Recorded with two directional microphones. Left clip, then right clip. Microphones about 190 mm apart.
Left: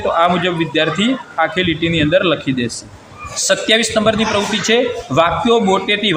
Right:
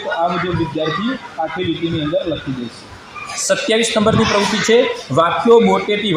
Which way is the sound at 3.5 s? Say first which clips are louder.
Left 2 dB; centre (ahead or behind).